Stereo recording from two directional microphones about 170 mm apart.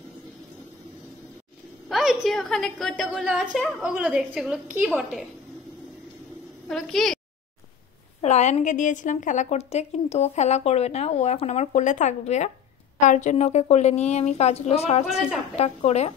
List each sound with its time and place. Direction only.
1.9 s a woman's voice: centre (ahead or behind)
6.7 s a woman's voice: centre (ahead or behind)
8.2 s a woman's voice: 40° left (ahead or behind)